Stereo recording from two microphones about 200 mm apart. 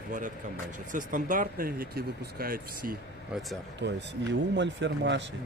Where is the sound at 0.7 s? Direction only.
40° right (ahead or behind).